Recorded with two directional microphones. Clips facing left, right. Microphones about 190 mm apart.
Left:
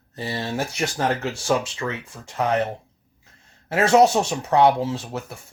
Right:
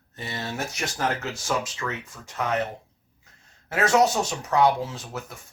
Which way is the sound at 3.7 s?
30° left (ahead or behind).